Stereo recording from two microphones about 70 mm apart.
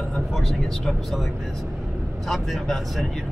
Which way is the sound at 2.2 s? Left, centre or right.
Centre.